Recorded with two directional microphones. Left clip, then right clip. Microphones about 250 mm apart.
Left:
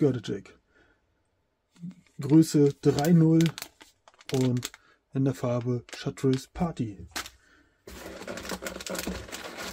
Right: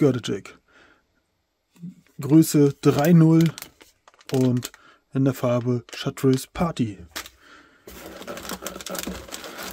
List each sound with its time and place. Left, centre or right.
0.0 s speech: right
2.1 s speech: right
3.4 s crumpling: centre
4.8 s speech: right
7.1 s a sound: centre
8.6 s sewing machine: right